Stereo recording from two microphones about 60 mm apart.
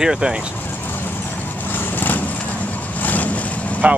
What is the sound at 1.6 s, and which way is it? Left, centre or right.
Vehicle, left.